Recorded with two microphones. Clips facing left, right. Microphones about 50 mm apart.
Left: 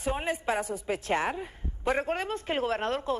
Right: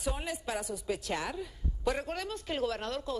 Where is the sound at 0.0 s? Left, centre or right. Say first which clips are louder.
Left 6 dB; left.